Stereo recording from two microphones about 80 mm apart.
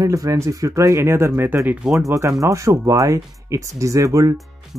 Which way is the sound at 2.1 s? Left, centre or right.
Right.